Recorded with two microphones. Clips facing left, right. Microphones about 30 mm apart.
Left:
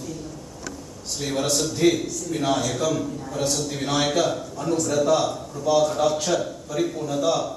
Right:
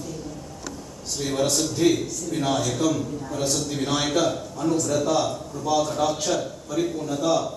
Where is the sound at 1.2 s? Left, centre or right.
Centre.